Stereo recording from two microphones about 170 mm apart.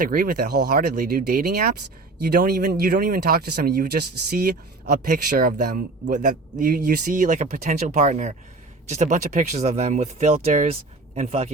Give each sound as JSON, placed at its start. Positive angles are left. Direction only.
{"t": 0.0, "sound": "speech", "side_deg": -55}
{"t": 6.6, "sound": "speech", "side_deg": -65}